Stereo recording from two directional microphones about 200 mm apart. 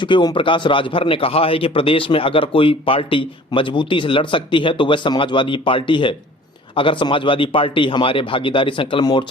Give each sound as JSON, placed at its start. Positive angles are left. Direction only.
{"t": 0.0, "sound": "a man's voice", "side_deg": 25}